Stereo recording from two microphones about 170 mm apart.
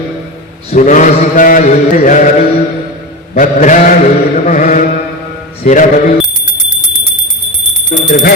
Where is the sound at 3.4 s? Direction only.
50° left (ahead or behind).